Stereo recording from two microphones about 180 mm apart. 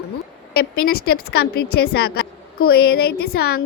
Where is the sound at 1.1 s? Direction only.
65° left (ahead or behind).